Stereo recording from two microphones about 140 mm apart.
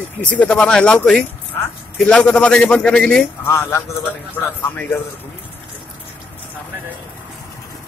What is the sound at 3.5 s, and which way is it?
A man's voice, 20° left (ahead or behind).